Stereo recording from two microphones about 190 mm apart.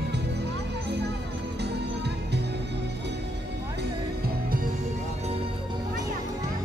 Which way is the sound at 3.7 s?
50° right (ahead or behind).